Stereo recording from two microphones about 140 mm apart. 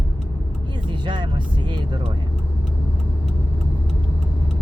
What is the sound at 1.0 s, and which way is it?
Speech, 35° right (ahead or behind).